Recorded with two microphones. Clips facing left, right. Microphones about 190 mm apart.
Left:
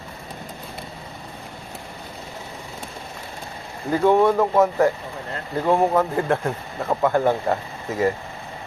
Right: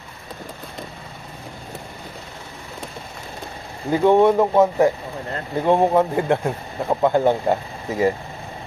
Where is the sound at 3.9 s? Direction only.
20° right (ahead or behind).